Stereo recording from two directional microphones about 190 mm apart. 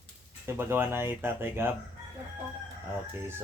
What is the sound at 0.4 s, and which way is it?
Speech, 10° right (ahead or behind).